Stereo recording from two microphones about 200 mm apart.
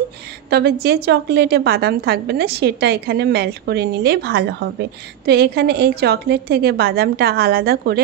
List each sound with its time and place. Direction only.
0.5 s a woman's voice: 55° right (ahead or behind)